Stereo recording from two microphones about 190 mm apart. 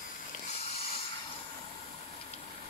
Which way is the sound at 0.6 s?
30° left (ahead or behind).